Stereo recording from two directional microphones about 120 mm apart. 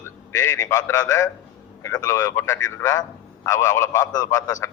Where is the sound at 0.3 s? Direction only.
20° left (ahead or behind).